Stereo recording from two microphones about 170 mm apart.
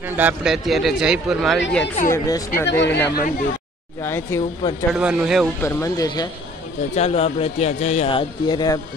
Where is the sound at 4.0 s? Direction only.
15° left (ahead or behind).